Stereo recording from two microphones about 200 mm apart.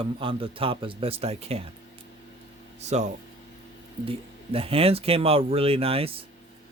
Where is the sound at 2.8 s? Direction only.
35° right (ahead or behind).